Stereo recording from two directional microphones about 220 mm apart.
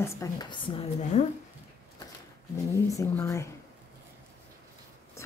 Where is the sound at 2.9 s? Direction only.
15° left (ahead or behind).